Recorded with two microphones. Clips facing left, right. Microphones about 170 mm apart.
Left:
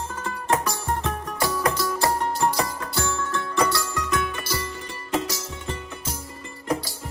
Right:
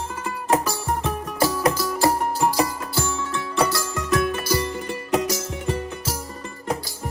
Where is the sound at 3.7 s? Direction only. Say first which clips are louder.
Right 3 dB; 25° right (ahead or behind).